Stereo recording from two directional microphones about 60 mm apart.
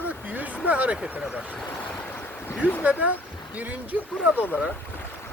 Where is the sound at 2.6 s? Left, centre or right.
Right.